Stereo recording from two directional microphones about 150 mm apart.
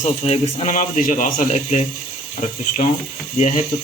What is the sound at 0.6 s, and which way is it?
Speech, 60° left (ahead or behind).